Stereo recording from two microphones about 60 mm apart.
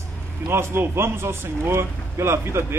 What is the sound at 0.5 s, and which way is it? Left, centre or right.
A man's voice, right.